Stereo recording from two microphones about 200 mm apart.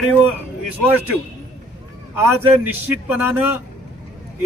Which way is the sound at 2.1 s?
10° right (ahead or behind).